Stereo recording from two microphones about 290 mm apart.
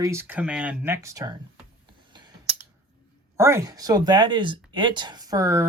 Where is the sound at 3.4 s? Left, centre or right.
Centre.